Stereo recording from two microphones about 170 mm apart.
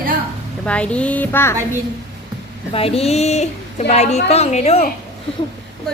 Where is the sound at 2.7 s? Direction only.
35° left (ahead or behind).